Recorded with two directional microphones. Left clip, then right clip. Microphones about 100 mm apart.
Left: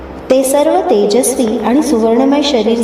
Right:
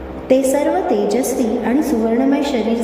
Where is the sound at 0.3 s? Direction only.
30° left (ahead or behind).